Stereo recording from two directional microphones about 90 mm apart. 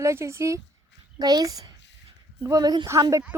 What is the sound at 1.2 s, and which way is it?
Speech, 50° right (ahead or behind).